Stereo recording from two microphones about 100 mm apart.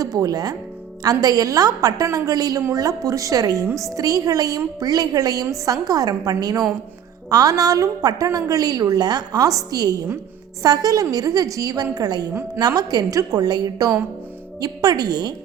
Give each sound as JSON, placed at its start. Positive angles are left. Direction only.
{"t": 0.0, "sound": "a woman's voice", "side_deg": -35}